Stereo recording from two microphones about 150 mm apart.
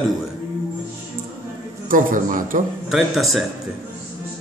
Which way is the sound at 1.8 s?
65° right (ahead or behind).